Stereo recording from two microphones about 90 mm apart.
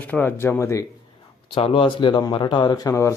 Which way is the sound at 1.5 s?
75° left (ahead or behind).